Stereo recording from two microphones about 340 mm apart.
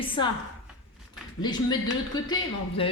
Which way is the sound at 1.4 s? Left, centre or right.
Centre.